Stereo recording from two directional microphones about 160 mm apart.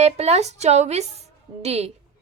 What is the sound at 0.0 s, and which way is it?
A woman's voice, 40° right (ahead or behind).